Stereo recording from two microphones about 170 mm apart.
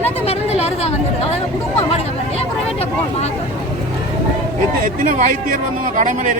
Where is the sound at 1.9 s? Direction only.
35° left (ahead or behind).